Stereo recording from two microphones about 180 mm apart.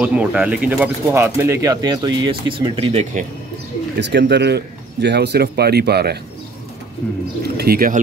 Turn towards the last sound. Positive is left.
turn(degrees=-55)  # may be behind; listen again after turning